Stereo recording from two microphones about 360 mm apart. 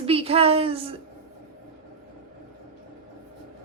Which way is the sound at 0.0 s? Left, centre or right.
Centre.